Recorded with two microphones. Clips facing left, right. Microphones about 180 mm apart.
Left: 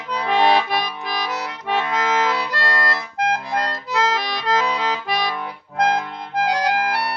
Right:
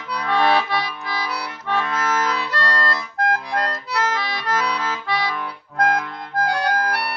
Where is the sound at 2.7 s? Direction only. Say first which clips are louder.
Even; 20° left (ahead or behind).